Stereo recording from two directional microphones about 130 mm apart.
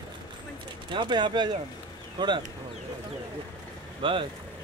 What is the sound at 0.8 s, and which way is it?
Speech, 35° right (ahead or behind).